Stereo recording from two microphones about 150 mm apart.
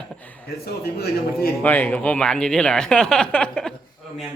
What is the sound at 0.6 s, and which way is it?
Speech, 90° left.